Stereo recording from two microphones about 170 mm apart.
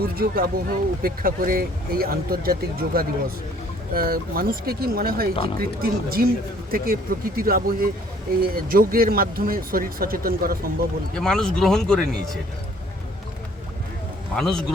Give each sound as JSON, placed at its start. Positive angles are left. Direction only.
{"t": 0.0, "sound": "speech", "side_deg": -60}
{"t": 11.1, "sound": "speech", "side_deg": 5}
{"t": 14.3, "sound": "speech", "side_deg": 5}